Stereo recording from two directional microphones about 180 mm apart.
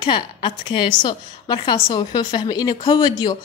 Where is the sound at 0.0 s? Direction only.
25° left (ahead or behind).